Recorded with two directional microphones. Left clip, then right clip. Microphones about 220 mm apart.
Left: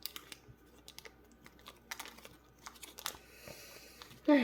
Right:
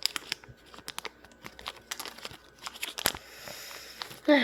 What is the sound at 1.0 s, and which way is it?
Crumpling, 45° right (ahead or behind).